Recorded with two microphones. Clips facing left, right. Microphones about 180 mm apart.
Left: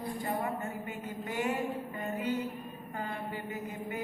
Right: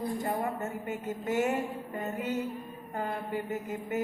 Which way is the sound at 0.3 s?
45° right (ahead or behind).